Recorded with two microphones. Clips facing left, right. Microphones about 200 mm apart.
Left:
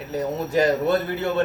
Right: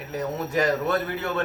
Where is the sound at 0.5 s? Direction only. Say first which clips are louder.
Left 4 dB; 30° left (ahead or behind).